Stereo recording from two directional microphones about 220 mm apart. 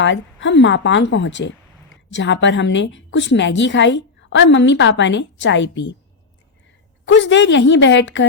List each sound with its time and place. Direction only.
0.0 s a woman's voice: 55° left (ahead or behind)
7.1 s a woman's voice: 55° left (ahead or behind)